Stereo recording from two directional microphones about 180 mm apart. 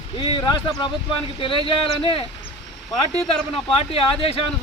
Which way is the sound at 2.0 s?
30° left (ahead or behind).